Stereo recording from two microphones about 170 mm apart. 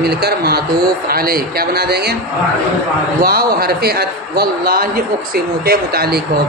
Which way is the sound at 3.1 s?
60° right (ahead or behind).